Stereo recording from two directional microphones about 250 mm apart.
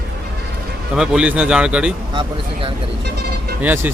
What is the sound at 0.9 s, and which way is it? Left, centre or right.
Speech, centre.